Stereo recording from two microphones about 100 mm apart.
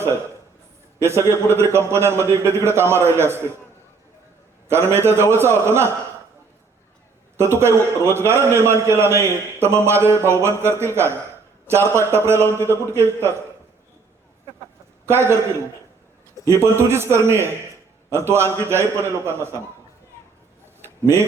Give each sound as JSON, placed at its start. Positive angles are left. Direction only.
{"t": 0.9, "sound": "a man's voice", "side_deg": -25}
{"t": 4.7, "sound": "a man's voice", "side_deg": -25}
{"t": 7.3, "sound": "a man's voice", "side_deg": -25}
{"t": 15.0, "sound": "a man's voice", "side_deg": -25}
{"t": 16.5, "sound": "a man's voice", "side_deg": -25}
{"t": 20.8, "sound": "a sound", "side_deg": -25}